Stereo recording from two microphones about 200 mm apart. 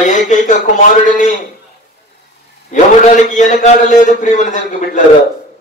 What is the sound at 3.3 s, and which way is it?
A man's voice, 40° left (ahead or behind).